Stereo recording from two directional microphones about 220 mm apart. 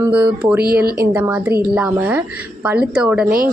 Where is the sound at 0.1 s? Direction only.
5° right (ahead or behind).